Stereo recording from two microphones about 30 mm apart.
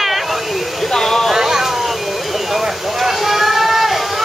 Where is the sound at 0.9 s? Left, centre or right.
Centre.